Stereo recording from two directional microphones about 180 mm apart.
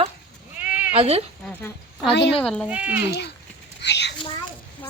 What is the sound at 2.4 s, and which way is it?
Speech, 5° left (ahead or behind).